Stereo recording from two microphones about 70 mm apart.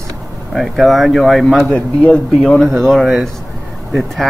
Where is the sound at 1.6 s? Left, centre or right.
Centre.